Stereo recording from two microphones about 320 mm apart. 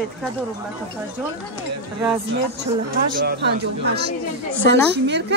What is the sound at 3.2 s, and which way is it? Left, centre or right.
A woman's voice, right.